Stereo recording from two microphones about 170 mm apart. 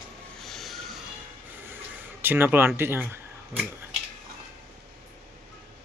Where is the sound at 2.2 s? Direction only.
10° right (ahead or behind).